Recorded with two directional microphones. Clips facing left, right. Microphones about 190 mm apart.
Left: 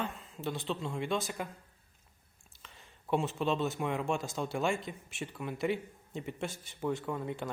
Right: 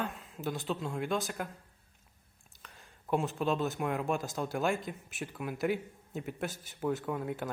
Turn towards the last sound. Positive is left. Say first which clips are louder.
# right 1 dB
turn(degrees=-5)  # may be behind; listen again after turning